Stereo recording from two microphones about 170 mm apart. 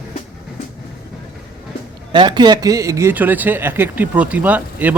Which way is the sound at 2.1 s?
25° right (ahead or behind).